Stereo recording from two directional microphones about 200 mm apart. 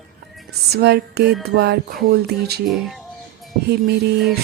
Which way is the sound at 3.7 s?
55° right (ahead or behind).